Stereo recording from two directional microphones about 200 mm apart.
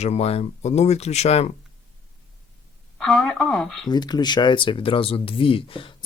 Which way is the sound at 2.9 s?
5° left (ahead or behind).